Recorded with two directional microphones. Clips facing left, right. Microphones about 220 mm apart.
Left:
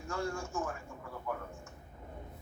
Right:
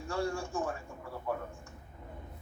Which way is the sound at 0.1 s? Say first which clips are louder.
Right 3 dB; 35° right (ahead or behind).